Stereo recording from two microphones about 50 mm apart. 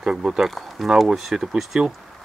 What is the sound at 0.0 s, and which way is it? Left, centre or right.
Speech, centre.